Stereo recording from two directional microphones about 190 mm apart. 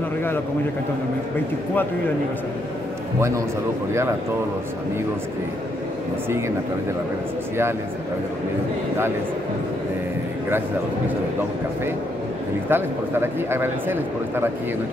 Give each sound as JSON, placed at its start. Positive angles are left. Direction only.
{"t": 3.2, "sound": "speech", "side_deg": -15}
{"t": 12.6, "sound": "speech", "side_deg": -10}